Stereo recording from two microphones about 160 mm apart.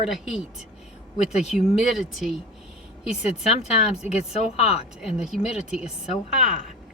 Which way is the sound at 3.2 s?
40° left (ahead or behind).